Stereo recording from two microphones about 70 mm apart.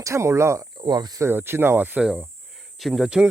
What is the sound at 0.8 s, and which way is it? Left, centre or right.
Speech, right.